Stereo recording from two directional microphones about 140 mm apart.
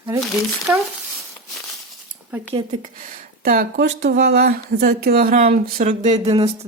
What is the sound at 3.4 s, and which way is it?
Speech, 90° right.